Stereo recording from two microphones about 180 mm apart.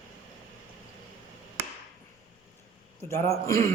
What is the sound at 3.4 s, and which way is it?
Speech, 15° left (ahead or behind).